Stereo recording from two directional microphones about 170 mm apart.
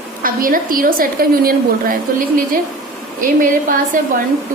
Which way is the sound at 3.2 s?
50° right (ahead or behind).